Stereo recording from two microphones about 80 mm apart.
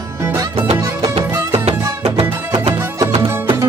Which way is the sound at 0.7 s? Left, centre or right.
Right.